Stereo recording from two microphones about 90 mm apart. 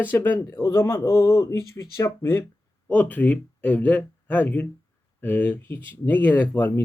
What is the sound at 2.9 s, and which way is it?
Speech, 20° left (ahead or behind).